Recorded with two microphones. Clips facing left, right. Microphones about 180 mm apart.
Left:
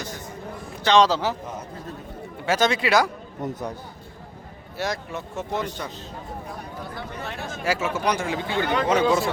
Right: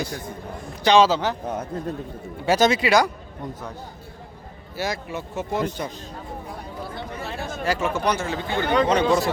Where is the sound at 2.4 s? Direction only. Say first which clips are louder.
Right 3 dB; 35° right (ahead or behind).